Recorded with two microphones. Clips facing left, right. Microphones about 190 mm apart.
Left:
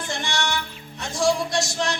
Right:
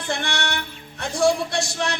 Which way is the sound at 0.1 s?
60° right (ahead or behind).